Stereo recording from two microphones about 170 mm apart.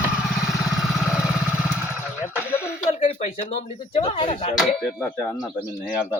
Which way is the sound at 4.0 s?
25° left (ahead or behind).